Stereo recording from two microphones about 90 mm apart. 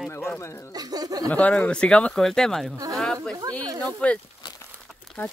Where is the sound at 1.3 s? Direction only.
15° left (ahead or behind).